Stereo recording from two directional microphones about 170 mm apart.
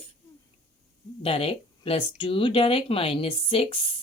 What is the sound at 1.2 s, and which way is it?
Speech, 35° left (ahead or behind).